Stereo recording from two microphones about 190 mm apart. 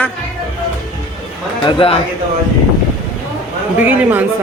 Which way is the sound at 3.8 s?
10° right (ahead or behind).